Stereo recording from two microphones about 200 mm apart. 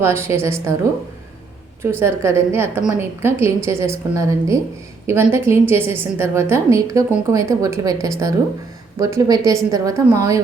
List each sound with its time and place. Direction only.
0.0 s a woman's voice: 10° right (ahead or behind)
1.8 s a woman's voice: 10° right (ahead or behind)